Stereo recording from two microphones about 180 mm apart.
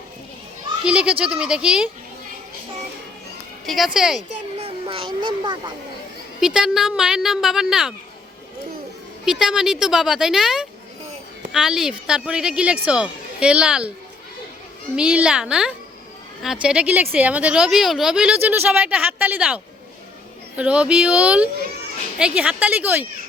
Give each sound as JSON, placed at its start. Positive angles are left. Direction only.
{"t": 0.9, "sound": "speech", "side_deg": -5}
{"t": 3.7, "sound": "speech", "side_deg": 0}
{"t": 4.5, "sound": "a sound", "side_deg": -30}
{"t": 6.4, "sound": "speech", "side_deg": -5}
{"t": 9.2, "sound": "speech", "side_deg": -5}
{"t": 14.9, "sound": "speech", "side_deg": -5}